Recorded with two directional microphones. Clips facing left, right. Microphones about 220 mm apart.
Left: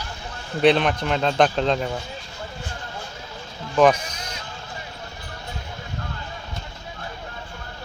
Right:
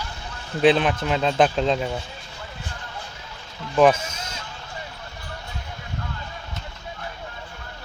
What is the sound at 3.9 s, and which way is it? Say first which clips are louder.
Speech: even; 25° right (ahead or behind).